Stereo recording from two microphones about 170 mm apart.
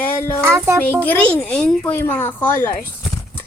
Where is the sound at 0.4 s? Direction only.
15° right (ahead or behind).